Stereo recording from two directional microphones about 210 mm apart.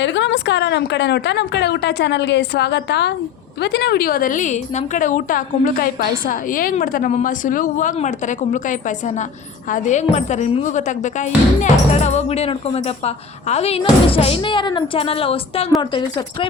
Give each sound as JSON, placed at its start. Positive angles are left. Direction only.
{"t": 0.0, "sound": "a woman's voice", "side_deg": 60}